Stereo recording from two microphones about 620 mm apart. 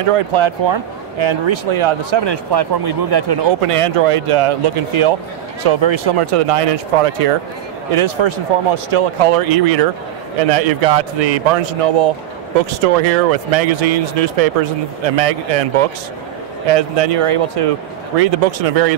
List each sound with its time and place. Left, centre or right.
0.0 s speech: right
3.6 s speech: right
12.5 s speech: right
16.6 s speech: right